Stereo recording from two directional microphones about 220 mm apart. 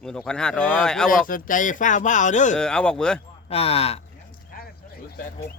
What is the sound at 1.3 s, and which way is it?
Speech, 40° left (ahead or behind).